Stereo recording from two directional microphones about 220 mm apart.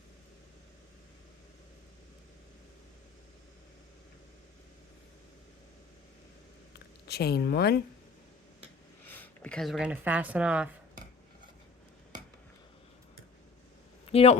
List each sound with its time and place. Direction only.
7.1 s speech: 45° left (ahead or behind)
9.0 s a woman's voice: 10° left (ahead or behind)
14.1 s speech: 25° left (ahead or behind)